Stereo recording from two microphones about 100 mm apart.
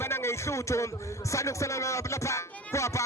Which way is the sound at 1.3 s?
30° left (ahead or behind).